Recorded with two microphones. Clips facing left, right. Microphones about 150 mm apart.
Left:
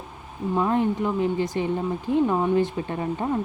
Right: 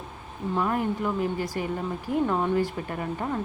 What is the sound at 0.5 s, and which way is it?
Speech, 20° left (ahead or behind).